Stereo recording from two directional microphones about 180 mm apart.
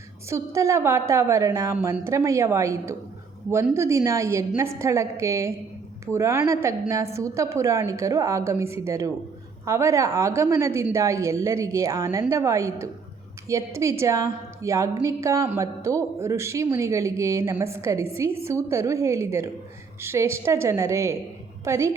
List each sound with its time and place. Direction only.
0.3 s a woman's voice: 15° right (ahead or behind)